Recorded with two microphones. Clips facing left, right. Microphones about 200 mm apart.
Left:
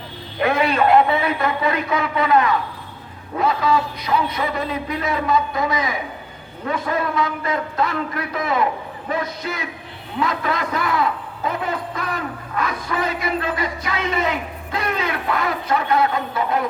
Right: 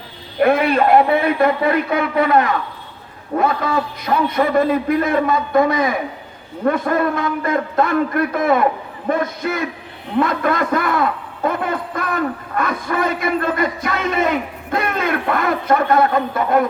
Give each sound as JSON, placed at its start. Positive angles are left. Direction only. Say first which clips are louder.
{"t": 0.3, "sound": "a man's voice", "louder": "right 4 dB", "side_deg": -55}